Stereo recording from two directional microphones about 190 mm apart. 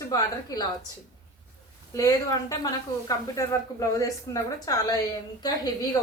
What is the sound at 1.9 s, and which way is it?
A woman's voice, 20° left (ahead or behind).